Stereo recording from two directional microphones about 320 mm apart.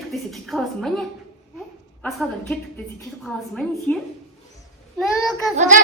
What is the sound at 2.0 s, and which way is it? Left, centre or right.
A woman's voice, centre.